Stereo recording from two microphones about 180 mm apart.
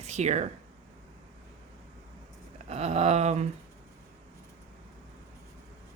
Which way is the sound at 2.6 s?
35° right (ahead or behind).